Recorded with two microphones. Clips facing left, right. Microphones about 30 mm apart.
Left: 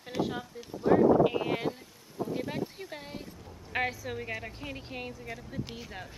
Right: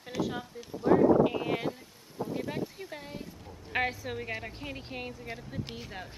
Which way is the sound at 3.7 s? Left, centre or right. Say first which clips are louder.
Right 1 dB; centre.